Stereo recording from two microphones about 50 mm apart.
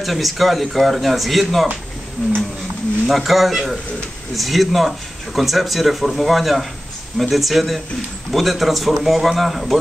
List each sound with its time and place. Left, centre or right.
0.0 s speech: centre
3.1 s speech: centre